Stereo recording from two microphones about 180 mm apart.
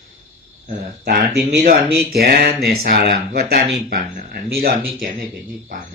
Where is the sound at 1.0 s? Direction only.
65° right (ahead or behind).